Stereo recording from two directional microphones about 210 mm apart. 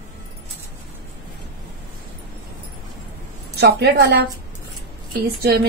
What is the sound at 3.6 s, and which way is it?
Speech, 55° right (ahead or behind).